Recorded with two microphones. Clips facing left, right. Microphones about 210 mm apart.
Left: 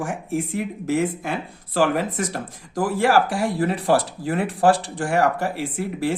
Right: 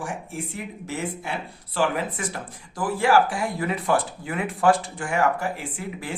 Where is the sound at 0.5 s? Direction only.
90° left.